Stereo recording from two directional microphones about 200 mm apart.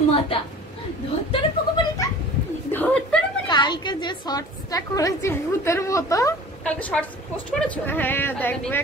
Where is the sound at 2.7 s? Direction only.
5° left (ahead or behind).